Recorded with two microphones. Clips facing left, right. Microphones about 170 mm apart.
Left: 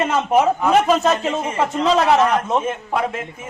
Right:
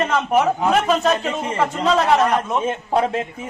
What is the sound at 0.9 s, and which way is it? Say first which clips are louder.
Speech: left 1 dB; 20° left (ahead or behind).